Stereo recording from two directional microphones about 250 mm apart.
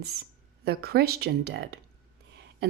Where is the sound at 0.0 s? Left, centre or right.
Right.